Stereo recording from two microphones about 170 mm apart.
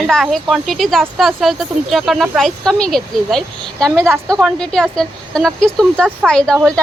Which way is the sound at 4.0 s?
15° right (ahead or behind).